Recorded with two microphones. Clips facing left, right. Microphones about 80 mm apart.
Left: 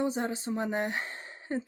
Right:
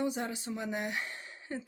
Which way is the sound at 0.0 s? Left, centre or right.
Left.